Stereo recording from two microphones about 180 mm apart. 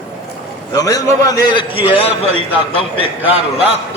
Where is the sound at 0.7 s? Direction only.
20° left (ahead or behind).